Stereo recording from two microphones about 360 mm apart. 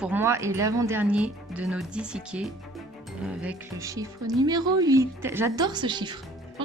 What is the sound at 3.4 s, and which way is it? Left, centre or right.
A man's voice, centre.